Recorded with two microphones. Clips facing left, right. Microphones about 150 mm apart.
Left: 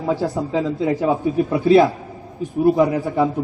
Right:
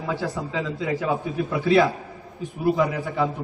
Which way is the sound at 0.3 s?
35° left (ahead or behind).